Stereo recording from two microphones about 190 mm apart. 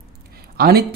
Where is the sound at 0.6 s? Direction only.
55° right (ahead or behind).